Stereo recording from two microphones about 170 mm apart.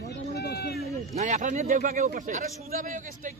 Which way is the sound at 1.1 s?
45° right (ahead or behind).